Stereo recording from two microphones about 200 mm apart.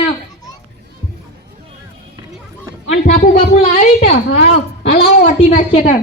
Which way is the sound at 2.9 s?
35° left (ahead or behind).